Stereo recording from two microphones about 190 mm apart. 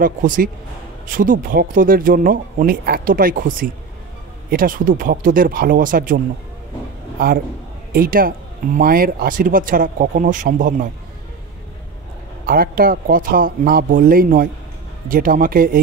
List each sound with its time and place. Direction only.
0.0 s speech: 45° right (ahead or behind)
7.9 s speech: 50° right (ahead or behind)
12.4 s speech: 50° right (ahead or behind)